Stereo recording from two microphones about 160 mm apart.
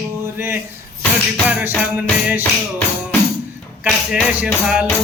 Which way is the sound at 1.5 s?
10° right (ahead or behind).